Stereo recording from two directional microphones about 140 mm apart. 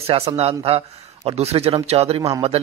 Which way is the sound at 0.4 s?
45° right (ahead or behind).